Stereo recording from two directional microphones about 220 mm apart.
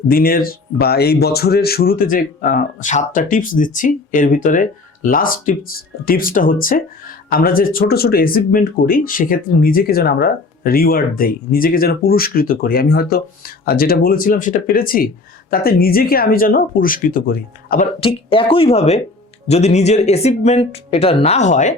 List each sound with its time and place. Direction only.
0.1 s speech: 40° left (ahead or behind)
18.0 s speech: 25° left (ahead or behind)